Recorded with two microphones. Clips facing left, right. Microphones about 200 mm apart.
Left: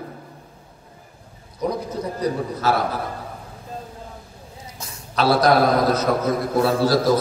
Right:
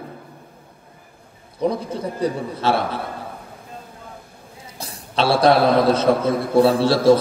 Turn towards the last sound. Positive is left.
turn(degrees=-30)  # may be behind; listen again after turning